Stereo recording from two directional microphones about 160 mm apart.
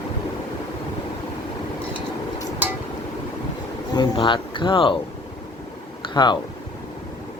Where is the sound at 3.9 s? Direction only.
30° left (ahead or behind).